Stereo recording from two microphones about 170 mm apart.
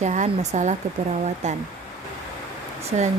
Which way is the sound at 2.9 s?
40° right (ahead or behind).